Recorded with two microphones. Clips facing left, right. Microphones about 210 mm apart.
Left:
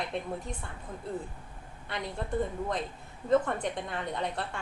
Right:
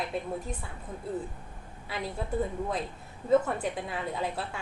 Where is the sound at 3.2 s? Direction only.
5° right (ahead or behind).